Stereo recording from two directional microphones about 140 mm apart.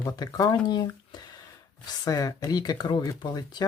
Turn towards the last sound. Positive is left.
turn(degrees=30)  # may be behind; listen again after turning